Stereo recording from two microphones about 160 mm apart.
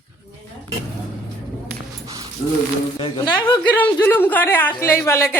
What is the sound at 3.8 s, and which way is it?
A man's voice, 10° left (ahead or behind).